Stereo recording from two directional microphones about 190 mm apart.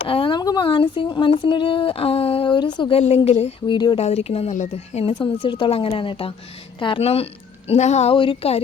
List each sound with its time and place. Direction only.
0.1 s speech: 25° left (ahead or behind)
3.2 s speech: 35° left (ahead or behind)
3.8 s speech: 25° left (ahead or behind)
4.0 s speech: 35° left (ahead or behind)